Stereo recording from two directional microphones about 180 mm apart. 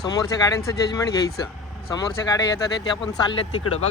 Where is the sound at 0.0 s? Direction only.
20° left (ahead or behind).